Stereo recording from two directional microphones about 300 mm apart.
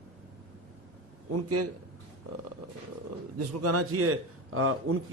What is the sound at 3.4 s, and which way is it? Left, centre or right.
A man's voice, right.